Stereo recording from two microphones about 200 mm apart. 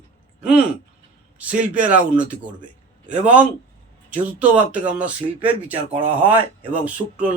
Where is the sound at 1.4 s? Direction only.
5° right (ahead or behind).